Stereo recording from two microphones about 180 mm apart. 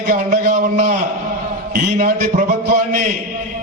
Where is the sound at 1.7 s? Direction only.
50° right (ahead or behind).